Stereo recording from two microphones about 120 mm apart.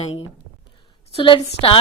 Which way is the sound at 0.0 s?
45° left (ahead or behind).